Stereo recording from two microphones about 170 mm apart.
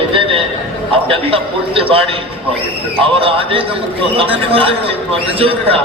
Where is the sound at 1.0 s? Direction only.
35° right (ahead or behind).